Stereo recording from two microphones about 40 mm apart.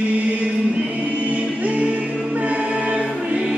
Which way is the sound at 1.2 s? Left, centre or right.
Right.